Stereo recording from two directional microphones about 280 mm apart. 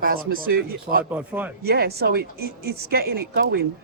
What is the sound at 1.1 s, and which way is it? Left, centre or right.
Speech, centre.